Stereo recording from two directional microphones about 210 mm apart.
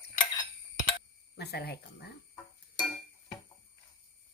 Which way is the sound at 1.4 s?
50° left (ahead or behind).